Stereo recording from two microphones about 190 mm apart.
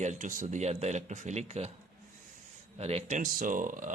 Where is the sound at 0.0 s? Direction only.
40° right (ahead or behind).